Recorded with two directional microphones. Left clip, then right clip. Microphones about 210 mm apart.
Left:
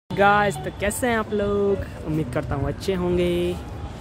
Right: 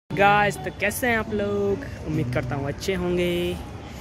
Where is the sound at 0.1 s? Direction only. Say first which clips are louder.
Left 1 dB; 10° left (ahead or behind).